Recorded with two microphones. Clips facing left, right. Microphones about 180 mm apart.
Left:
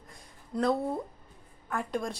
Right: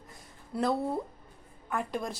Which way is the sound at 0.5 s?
5° right (ahead or behind).